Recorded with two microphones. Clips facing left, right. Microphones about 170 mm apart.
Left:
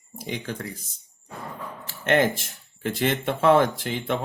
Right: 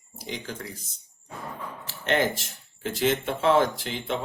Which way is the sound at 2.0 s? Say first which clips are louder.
Left 3 dB; 50° left (ahead or behind).